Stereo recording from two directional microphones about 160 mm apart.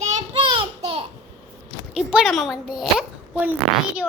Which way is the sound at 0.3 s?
35° right (ahead or behind).